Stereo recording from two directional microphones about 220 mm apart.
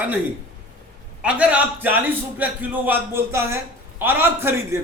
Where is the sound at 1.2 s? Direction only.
5° right (ahead or behind).